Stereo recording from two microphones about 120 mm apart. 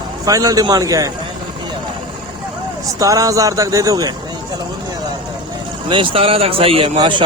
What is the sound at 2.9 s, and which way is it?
Speech, 30° right (ahead or behind).